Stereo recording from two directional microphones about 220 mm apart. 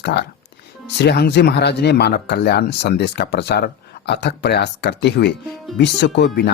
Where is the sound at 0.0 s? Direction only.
50° left (ahead or behind).